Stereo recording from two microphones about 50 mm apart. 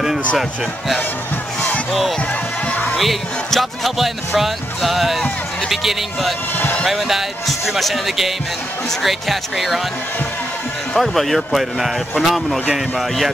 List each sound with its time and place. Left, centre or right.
1.9 s speech: centre
2.7 s music: left
3.0 s speech: centre
11.0 s speech: centre